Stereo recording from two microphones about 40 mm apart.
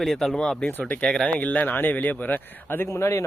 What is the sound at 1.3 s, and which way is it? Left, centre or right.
Speech, left.